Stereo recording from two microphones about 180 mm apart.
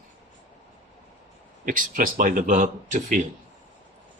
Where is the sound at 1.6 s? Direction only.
50° right (ahead or behind).